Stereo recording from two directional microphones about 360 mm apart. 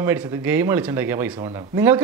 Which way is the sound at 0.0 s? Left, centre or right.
Centre.